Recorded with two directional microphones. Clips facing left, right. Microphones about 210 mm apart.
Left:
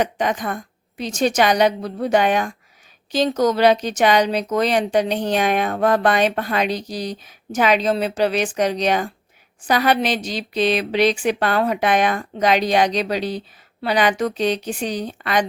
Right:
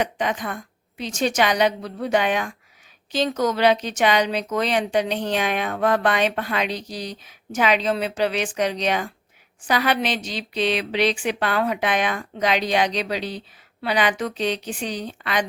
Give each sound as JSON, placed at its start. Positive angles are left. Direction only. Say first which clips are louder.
{"t": 0.0, "sound": "a woman's voice", "louder": "left 3 dB", "side_deg": 40}